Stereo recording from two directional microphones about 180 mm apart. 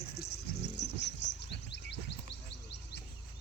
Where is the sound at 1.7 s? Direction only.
75° left (ahead or behind).